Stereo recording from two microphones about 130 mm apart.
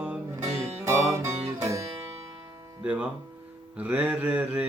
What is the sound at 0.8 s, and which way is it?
Music, 20° right (ahead or behind).